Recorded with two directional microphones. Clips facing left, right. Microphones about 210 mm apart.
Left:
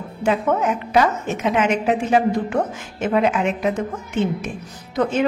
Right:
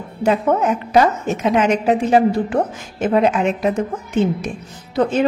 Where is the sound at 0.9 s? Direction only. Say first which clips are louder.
Right 3 dB; 40° right (ahead or behind).